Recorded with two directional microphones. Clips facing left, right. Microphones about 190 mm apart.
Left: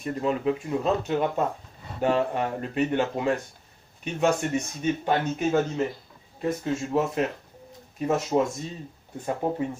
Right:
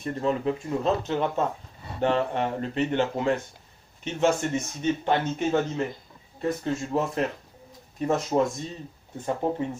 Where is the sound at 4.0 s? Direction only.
25° right (ahead or behind).